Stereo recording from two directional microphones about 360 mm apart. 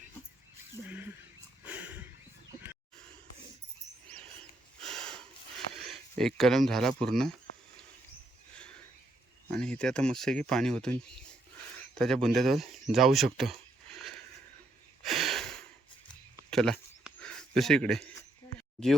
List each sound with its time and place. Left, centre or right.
0.9 s a sound: centre
4.8 s snort: centre
5.7 s speech: centre
9.5 s speech: centre
11.9 s speech: centre
15.0 s a sound: centre